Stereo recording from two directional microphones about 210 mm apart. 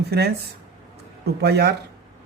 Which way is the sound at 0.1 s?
50° right (ahead or behind).